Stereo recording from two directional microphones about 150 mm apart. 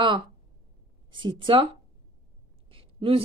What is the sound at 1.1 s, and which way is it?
Speech, 35° right (ahead or behind).